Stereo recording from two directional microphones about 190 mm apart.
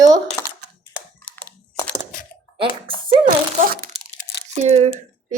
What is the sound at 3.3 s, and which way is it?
Speech, 50° right (ahead or behind).